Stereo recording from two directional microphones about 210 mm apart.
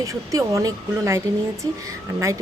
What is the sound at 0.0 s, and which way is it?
Speech, 15° right (ahead or behind).